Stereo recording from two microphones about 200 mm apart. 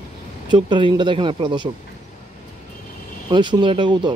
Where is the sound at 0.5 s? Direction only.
25° right (ahead or behind).